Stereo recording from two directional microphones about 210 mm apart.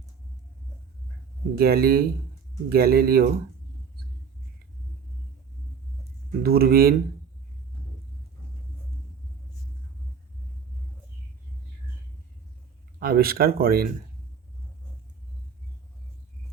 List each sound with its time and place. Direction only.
1.5 s speech: 45° right (ahead or behind)
6.4 s speech: 45° right (ahead or behind)
13.0 s speech: 45° right (ahead or behind)